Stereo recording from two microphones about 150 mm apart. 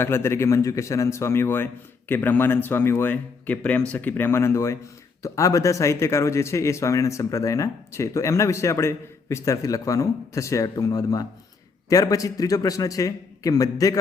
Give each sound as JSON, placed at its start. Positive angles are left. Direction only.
{"t": 0.0, "sound": "a man's voice", "side_deg": 15}